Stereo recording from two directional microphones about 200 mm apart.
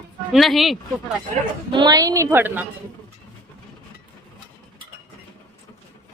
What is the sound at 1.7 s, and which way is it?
Speech, 20° right (ahead or behind).